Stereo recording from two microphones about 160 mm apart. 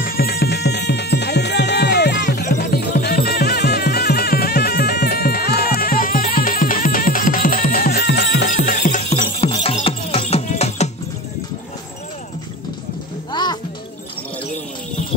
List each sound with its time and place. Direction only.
0.0 s music: 70° left (ahead or behind); by 2.4 s 90° left
2.4 s music: 60° left (ahead or behind)
5.8 s music: 60° left (ahead or behind)
9.4 s music: 35° left (ahead or behind)
13.3 s music: 25° left (ahead or behind)